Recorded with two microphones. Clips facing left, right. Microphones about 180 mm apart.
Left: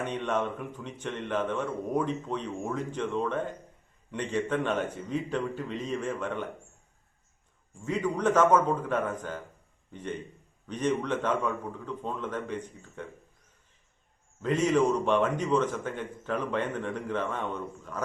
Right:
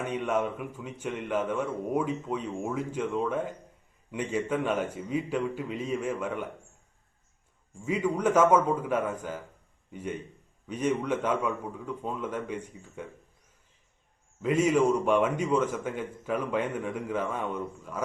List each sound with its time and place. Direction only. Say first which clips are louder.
0.0 s a man's voice: right 1 dB; 5° right (ahead or behind)
7.8 s a man's voice: right 1 dB; 10° right (ahead or behind)
14.4 s a man's voice: right 1 dB; 10° right (ahead or behind)